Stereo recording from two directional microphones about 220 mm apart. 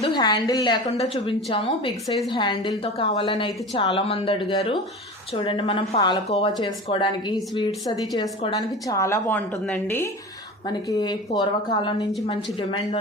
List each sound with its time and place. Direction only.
0.0 s a woman's voice: 20° left (ahead or behind)
10.7 s a woman's voice: 15° left (ahead or behind)